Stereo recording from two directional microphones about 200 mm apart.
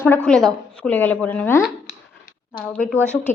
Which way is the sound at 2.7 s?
10° left (ahead or behind).